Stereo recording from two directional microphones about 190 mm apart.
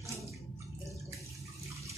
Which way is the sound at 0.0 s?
15° right (ahead or behind).